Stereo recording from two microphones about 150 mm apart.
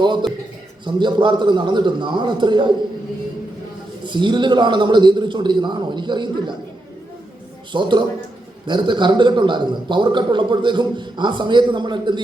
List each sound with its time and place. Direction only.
0.0 s a sound: 30° right (ahead or behind)
0.9 s a man's voice: 30° right (ahead or behind)
4.0 s a man's voice: 30° right (ahead or behind)
7.7 s a man's voice: 30° right (ahead or behind)